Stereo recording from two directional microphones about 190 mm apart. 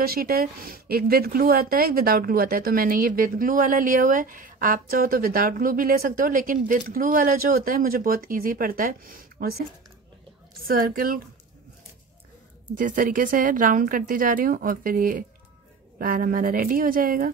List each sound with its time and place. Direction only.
0.0 s a woman's voice: 55° right (ahead or behind)
10.7 s a woman's voice: 50° right (ahead or behind)
12.7 s a woman's voice: 45° right (ahead or behind)